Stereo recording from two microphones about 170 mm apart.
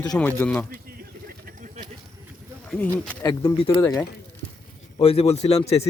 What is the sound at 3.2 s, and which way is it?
Speech, 30° left (ahead or behind).